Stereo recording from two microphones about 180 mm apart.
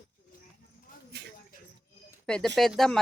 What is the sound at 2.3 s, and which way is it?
Speech, 5° left (ahead or behind).